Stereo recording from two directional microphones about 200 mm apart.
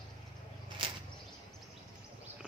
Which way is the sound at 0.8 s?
25° right (ahead or behind).